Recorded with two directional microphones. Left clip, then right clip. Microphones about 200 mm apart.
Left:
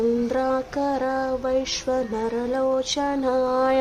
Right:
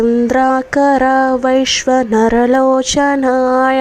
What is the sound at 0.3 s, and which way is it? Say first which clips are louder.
Mantra: right 11 dB; 40° right (ahead or behind).